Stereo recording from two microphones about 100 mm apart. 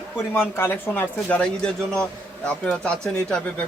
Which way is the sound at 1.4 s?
10° left (ahead or behind).